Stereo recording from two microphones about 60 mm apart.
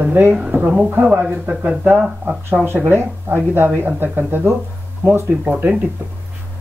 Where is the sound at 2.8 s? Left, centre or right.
Right.